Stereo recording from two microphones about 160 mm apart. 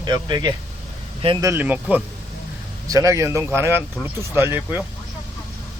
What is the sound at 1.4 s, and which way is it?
Speech, 15° right (ahead or behind).